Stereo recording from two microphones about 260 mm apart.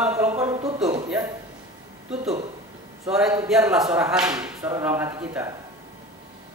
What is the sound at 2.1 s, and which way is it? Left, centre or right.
Speech, right.